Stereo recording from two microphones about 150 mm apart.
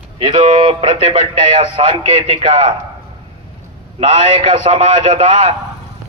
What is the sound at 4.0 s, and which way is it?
A man's voice, 40° right (ahead or behind).